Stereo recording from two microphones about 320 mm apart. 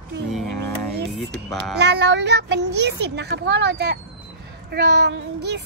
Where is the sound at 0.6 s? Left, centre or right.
Right.